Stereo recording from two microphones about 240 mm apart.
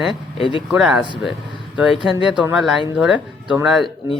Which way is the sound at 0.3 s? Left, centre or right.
Left.